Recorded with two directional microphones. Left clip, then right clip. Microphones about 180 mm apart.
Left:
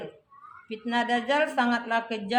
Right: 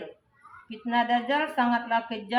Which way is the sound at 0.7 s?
60° left (ahead or behind).